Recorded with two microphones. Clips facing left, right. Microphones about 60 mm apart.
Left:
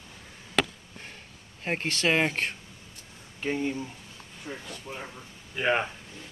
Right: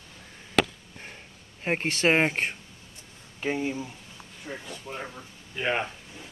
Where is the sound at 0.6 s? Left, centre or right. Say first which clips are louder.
Right 3 dB; centre.